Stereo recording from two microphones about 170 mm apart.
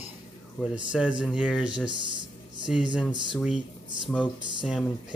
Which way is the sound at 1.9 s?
30° right (ahead or behind).